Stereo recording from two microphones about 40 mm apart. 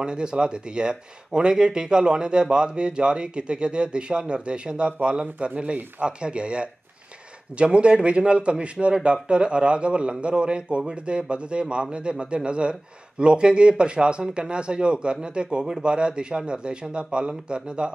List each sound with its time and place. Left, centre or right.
0.0 s speech: right